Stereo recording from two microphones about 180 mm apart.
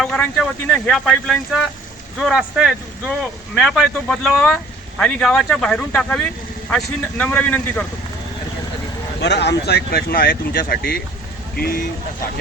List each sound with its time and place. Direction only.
0.0 s a man's voice: centre (ahead or behind)
9.2 s speech: 70° left (ahead or behind)